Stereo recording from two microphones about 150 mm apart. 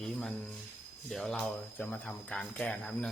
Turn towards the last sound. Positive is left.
turn(degrees=5)  # may be behind; listen again after turning